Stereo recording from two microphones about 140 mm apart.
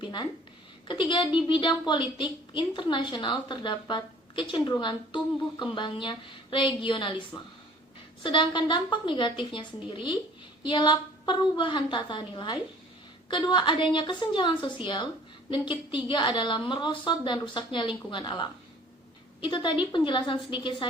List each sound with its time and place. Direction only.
0.0 s a woman's voice: 35° left (ahead or behind)
7.3 s speech: 25° left (ahead or behind)
8.2 s a woman's voice: 35° left (ahead or behind)